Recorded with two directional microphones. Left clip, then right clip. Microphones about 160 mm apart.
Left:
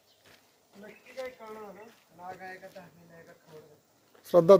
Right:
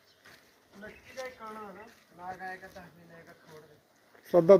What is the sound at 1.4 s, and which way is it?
Speech, 5° right (ahead or behind).